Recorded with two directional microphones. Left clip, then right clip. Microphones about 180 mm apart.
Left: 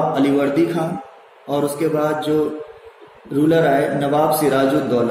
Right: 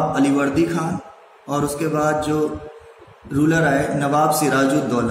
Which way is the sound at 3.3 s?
35° right (ahead or behind).